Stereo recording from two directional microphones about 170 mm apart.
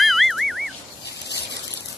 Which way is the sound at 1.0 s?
80° left.